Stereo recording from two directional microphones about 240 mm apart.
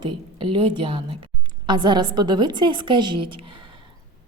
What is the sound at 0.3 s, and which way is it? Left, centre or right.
A woman's voice, right.